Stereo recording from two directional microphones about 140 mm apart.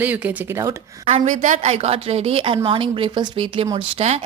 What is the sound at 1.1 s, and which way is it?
A woman's voice, 50° right (ahead or behind).